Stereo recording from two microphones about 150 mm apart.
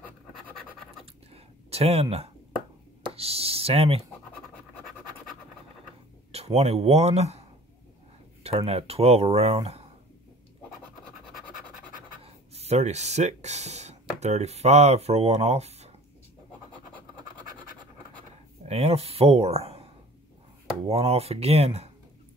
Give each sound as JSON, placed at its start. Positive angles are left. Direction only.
{"t": 1.3, "sound": "a sound", "side_deg": -40}
{"t": 3.2, "sound": "speech", "side_deg": -40}
{"t": 6.3, "sound": "speech", "side_deg": -45}
{"t": 8.5, "sound": "speech", "side_deg": -40}
{"t": 12.2, "sound": "speech", "side_deg": -45}
{"t": 18.7, "sound": "speech", "side_deg": -45}
{"t": 20.9, "sound": "speech", "side_deg": -45}